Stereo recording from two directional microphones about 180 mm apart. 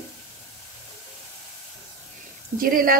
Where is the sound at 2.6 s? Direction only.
55° right (ahead or behind).